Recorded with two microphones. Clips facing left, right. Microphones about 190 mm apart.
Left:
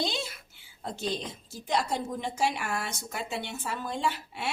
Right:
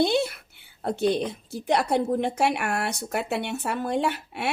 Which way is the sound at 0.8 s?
60° right (ahead or behind).